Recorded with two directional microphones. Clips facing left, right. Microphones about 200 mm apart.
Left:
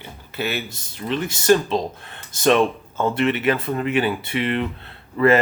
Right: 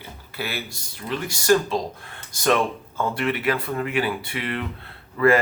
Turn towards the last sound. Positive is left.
turn(degrees=25)  # may be behind; listen again after turning